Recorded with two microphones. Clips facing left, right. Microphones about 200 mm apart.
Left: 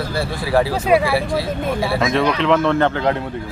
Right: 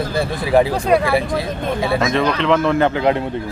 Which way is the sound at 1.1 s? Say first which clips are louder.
Right 1 dB; 20° right (ahead or behind).